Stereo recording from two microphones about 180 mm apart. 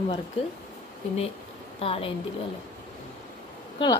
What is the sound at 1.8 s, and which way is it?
Speech, 35° left (ahead or behind).